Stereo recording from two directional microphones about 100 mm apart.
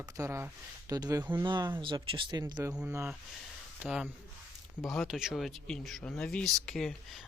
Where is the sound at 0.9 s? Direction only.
40° right (ahead or behind).